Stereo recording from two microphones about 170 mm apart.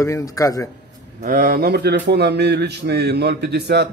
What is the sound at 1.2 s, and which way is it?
Speech, 55° right (ahead or behind).